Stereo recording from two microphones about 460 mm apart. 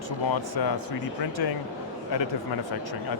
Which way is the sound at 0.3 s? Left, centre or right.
Left.